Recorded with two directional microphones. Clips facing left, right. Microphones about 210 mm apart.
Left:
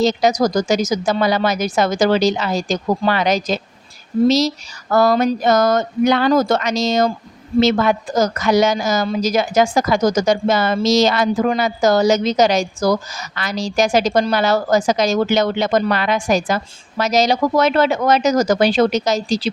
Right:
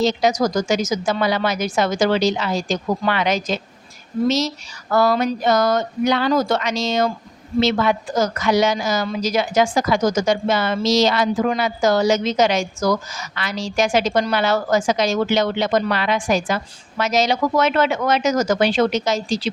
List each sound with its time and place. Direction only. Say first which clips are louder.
0.0 s a woman's voice: left 2 dB; 40° left (ahead or behind)